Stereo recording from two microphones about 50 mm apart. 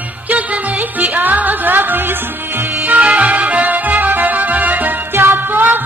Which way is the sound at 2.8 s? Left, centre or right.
Right.